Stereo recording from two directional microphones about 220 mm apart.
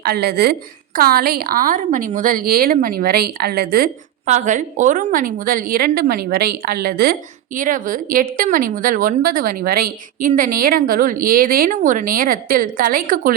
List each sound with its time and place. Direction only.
0.0 s a woman's voice: 45° right (ahead or behind)
4.3 s a woman's voice: 35° right (ahead or behind)